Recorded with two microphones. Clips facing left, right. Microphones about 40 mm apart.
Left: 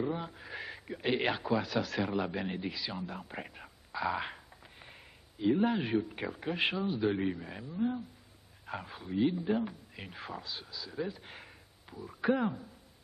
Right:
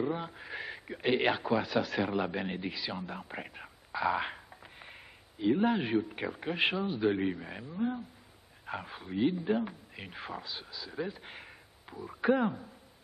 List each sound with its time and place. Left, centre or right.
0.0 s a man's voice: centre